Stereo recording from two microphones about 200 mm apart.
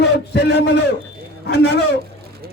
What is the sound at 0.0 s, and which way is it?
A man's voice, 55° left (ahead or behind).